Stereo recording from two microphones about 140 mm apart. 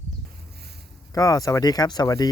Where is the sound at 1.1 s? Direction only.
25° left (ahead or behind).